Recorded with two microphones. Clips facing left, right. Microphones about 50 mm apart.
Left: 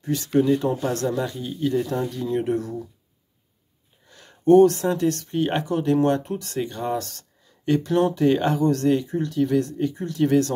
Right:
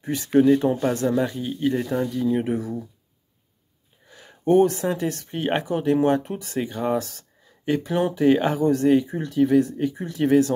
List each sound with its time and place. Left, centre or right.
0.0 s speech: right
4.1 s speech: centre